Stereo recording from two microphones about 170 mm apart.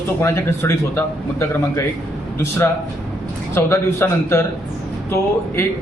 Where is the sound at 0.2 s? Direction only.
15° left (ahead or behind).